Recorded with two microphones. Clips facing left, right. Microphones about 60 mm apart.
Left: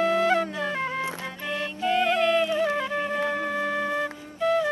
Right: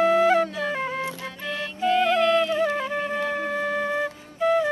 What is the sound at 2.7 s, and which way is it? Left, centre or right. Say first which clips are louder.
Music: even; centre.